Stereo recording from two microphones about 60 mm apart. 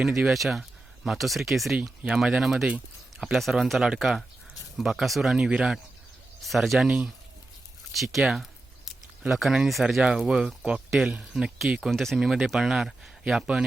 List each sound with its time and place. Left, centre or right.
0.3 s speech: centre
6.4 s speech: centre
6.8 s speech: centre
7.9 s a sound: centre
9.3 s speech: centre